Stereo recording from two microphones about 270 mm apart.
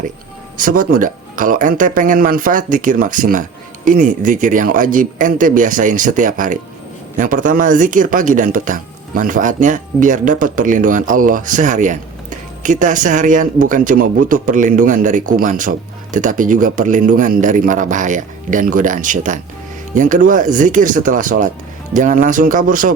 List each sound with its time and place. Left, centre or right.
0.5 s speech: right